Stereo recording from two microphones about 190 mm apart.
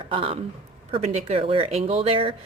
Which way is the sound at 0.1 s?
30° right (ahead or behind).